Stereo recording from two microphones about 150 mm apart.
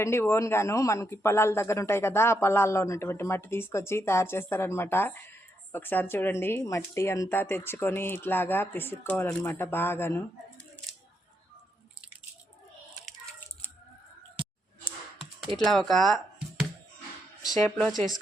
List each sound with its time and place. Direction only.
0.0 s speech: 15° left (ahead or behind)
15.5 s speech: centre (ahead or behind)
17.7 s speech: centre (ahead or behind)